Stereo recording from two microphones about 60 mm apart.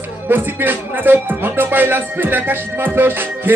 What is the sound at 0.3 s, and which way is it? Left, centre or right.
Music, right.